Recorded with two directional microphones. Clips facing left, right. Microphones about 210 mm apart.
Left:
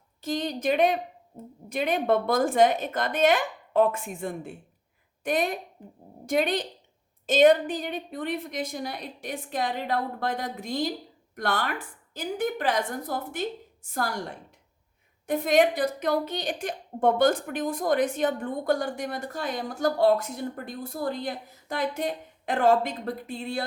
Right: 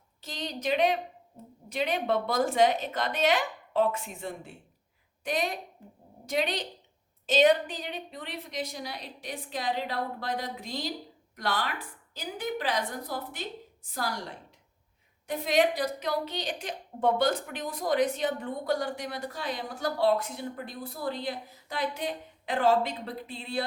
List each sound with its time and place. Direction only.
0.2 s a woman's voice: 50° left (ahead or behind)